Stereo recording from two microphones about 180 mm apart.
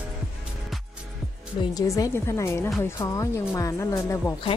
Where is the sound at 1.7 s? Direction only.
20° left (ahead or behind).